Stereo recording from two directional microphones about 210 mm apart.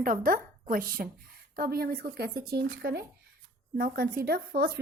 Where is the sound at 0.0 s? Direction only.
40° right (ahead or behind).